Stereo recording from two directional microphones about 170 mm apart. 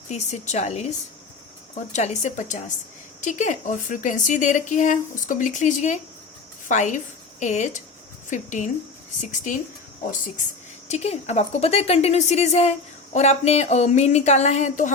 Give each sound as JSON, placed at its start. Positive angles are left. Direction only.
{"t": 0.1, "sound": "speech", "side_deg": 40}
{"t": 1.9, "sound": "a woman's voice", "side_deg": 40}
{"t": 10.8, "sound": "speech", "side_deg": 40}